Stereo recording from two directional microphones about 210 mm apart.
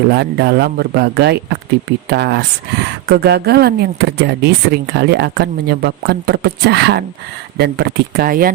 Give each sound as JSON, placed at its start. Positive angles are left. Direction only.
{"t": 0.1, "sound": "speech", "side_deg": -50}